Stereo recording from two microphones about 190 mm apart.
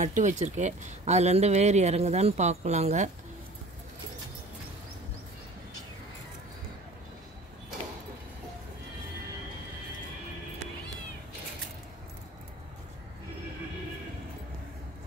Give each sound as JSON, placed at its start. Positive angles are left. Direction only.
{"t": 0.0, "sound": "speech", "side_deg": -40}